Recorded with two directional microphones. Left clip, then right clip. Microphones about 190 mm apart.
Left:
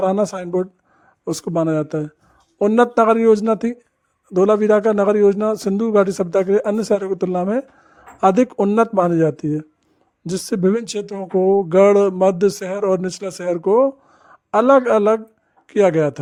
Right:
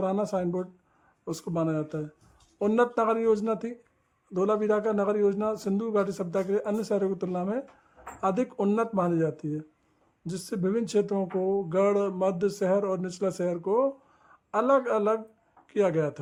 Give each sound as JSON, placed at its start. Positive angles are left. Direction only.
{"t": 0.0, "sound": "speech", "side_deg": 45}